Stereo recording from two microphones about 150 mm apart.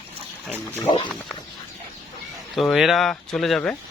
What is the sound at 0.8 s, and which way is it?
Speech, 30° left (ahead or behind).